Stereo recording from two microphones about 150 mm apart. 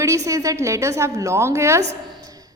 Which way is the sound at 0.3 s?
20° right (ahead or behind).